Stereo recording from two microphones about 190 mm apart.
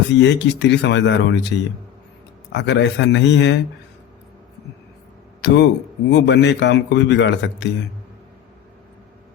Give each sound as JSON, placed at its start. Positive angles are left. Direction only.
{"t": 0.1, "sound": "a man's voice", "side_deg": 65}
{"t": 5.4, "sound": "a man's voice", "side_deg": 65}